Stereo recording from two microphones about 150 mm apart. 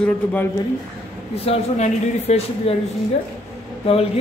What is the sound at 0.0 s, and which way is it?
Speech, 10° left (ahead or behind).